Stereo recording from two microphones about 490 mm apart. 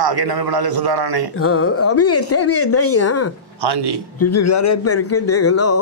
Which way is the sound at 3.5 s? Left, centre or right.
Right.